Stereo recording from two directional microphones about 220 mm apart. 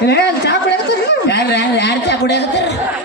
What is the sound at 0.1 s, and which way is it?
Speech, 50° left (ahead or behind).